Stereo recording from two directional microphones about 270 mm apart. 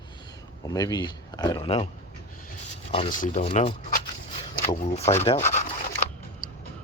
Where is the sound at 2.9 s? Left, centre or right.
Left.